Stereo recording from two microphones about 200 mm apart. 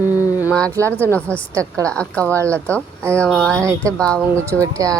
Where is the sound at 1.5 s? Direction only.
15° right (ahead or behind).